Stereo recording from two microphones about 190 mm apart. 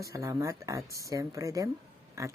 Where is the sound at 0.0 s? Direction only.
15° right (ahead or behind).